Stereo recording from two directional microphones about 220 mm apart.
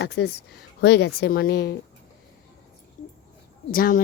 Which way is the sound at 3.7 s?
40° left (ahead or behind).